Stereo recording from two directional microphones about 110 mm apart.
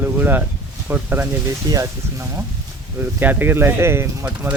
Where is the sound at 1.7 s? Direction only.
30° right (ahead or behind).